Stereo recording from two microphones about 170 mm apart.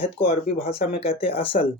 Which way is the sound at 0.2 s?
35° left (ahead or behind).